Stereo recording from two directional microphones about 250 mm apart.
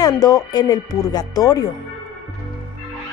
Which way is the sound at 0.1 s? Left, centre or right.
Centre.